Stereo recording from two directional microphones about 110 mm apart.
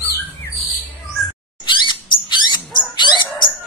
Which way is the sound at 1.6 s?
45° left (ahead or behind).